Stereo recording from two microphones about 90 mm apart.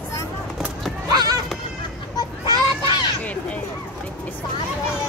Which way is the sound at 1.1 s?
50° right (ahead or behind).